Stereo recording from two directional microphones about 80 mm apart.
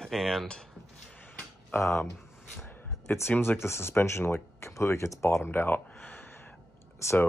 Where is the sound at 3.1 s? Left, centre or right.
Left.